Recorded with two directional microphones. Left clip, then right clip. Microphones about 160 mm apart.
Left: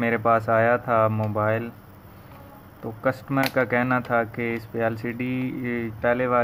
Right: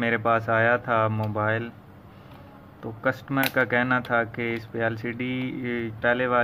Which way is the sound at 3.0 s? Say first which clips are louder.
Left 1 dB; 10° left (ahead or behind).